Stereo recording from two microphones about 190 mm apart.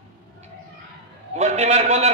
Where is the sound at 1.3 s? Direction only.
35° right (ahead or behind).